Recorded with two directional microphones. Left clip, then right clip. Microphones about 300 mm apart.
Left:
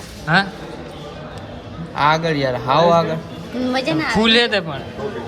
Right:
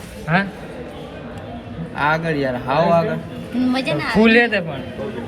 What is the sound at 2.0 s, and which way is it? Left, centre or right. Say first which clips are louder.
A man's voice: left 3 dB; left.